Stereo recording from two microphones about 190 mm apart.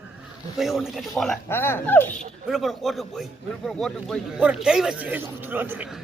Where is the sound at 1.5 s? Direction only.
10° left (ahead or behind).